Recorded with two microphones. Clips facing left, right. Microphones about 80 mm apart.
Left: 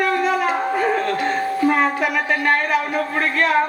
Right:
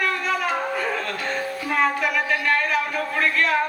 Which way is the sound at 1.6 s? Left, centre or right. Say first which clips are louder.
Left 3 dB; left.